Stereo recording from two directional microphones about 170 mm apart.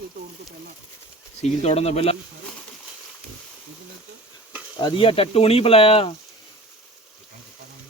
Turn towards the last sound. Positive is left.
turn(degrees=35)  # may be behind; listen again after turning